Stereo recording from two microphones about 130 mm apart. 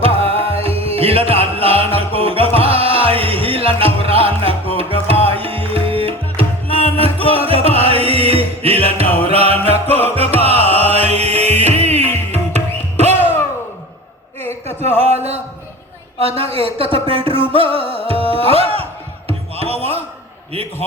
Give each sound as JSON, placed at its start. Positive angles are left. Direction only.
{"t": 0.0, "sound": "music", "side_deg": -50}
{"t": 14.8, "sound": "a sound", "side_deg": -55}
{"t": 16.2, "sound": "speech", "side_deg": -50}
{"t": 17.8, "sound": "music", "side_deg": 45}
{"t": 18.3, "sound": "music", "side_deg": -45}
{"t": 19.3, "sound": "a sound", "side_deg": -50}